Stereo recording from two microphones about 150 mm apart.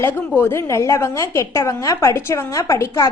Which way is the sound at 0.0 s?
15° left (ahead or behind).